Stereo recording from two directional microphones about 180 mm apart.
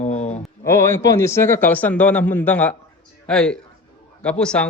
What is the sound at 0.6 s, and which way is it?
A man's voice, 15° left (ahead or behind).